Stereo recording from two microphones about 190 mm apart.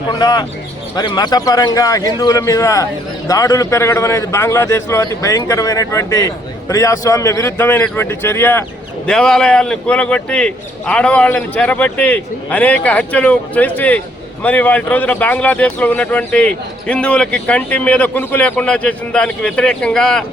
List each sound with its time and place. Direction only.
0.1 s bird: 20° left (ahead or behind)
0.9 s speech: 20° left (ahead or behind); by 20.2 s 5° left (ahead or behind)